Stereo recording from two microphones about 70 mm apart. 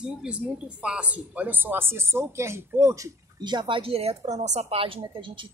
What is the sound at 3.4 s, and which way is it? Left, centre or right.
Speech, right.